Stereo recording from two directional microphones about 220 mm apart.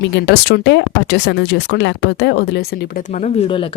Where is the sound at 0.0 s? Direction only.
50° left (ahead or behind).